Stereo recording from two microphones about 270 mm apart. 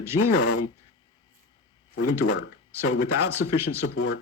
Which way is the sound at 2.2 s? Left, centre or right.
Left.